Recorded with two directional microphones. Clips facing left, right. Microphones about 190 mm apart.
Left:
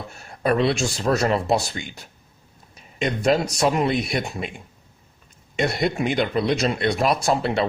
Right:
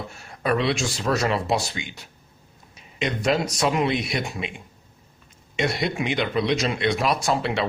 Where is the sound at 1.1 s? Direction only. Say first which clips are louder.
Left 3 dB; 30° left (ahead or behind).